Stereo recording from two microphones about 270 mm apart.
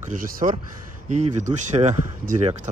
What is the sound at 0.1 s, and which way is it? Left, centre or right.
Speech, right.